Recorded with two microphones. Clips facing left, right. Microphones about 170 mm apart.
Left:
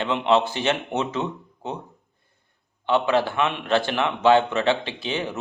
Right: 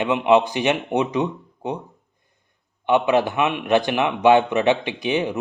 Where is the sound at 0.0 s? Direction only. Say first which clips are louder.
Right 4 dB; 15° right (ahead or behind).